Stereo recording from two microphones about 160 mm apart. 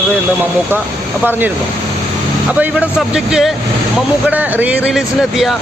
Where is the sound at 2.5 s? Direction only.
10° right (ahead or behind).